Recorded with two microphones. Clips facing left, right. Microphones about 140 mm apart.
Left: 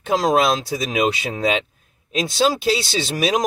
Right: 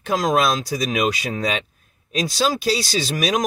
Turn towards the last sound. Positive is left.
turn(degrees=25)  # may be behind; listen again after turning